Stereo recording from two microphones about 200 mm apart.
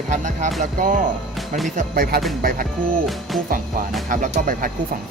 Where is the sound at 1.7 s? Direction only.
50° right (ahead or behind).